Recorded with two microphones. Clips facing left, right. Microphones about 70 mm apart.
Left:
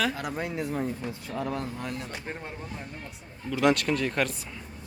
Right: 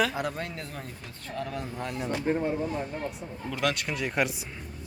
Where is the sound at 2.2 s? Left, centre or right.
Centre.